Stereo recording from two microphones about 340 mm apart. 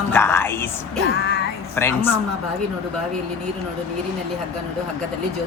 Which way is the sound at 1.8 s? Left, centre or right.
Centre.